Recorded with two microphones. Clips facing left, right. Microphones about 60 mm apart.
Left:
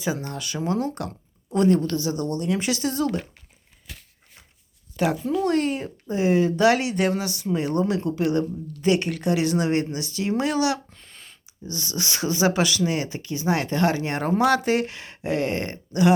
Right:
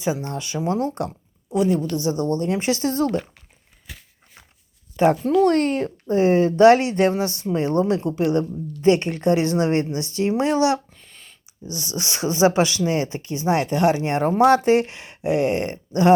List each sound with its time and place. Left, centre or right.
0.0 s speech: right
1.5 s speech: centre
2.0 s speech: right
5.3 s speech: right
6.1 s speech: right
10.8 s a sound: centre
11.7 s speech: right